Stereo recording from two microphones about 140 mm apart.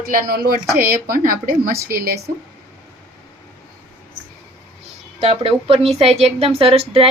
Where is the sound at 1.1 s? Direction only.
80° right.